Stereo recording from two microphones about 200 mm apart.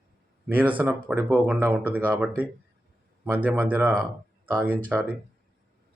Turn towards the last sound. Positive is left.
turn(degrees=-10)  # may be behind; listen again after turning